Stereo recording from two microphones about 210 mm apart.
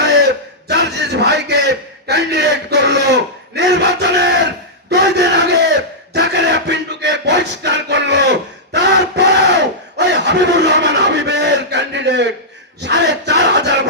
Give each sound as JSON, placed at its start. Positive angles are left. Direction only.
{"t": 0.0, "sound": "crowd", "side_deg": -55}
{"t": 0.7, "sound": "a sound", "side_deg": -55}
{"t": 12.8, "sound": "battle cry", "side_deg": -55}